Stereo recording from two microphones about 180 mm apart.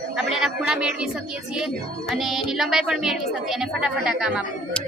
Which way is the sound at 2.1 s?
Centre (ahead or behind).